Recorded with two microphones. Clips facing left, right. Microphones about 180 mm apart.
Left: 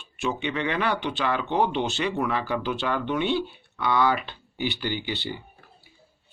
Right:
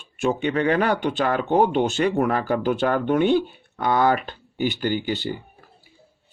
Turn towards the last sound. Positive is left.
turn(degrees=-45)  # may be behind; listen again after turning